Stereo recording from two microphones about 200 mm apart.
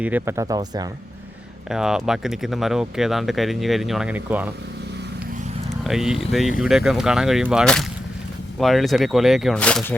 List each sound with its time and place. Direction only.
0.0 s speech: 10° right (ahead or behind)
1.7 s speech: 5° right (ahead or behind)
5.8 s speech: centre (ahead or behind)